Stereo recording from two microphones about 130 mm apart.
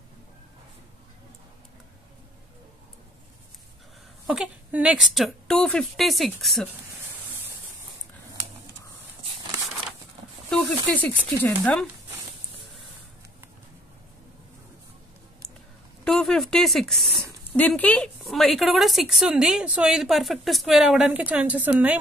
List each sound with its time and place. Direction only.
4.3 s a woman's voice: 10° right (ahead or behind)
10.5 s speech: 10° left (ahead or behind)
16.0 s a sound: 5° left (ahead or behind)
17.6 s speech: 10° left (ahead or behind)
18.2 s a woman's voice: centre (ahead or behind)